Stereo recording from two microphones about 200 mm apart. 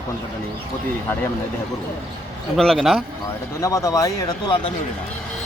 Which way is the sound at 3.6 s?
15° left (ahead or behind).